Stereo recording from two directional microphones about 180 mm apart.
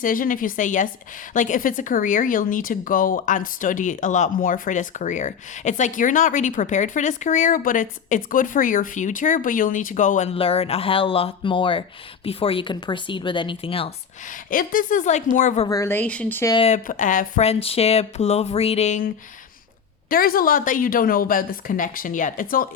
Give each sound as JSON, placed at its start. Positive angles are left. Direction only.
{"t": 0.0, "sound": "speech", "side_deg": 50}
{"t": 14.3, "sound": "speech", "side_deg": 50}
{"t": 15.6, "sound": "a woman's voice", "side_deg": 15}
{"t": 16.6, "sound": "speech", "side_deg": 35}
{"t": 16.8, "sound": "speech", "side_deg": 45}
{"t": 20.1, "sound": "speech", "side_deg": 55}